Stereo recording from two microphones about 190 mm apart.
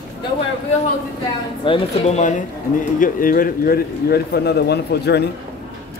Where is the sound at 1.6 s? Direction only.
30° left (ahead or behind); by 5.2 s 60° left (ahead or behind).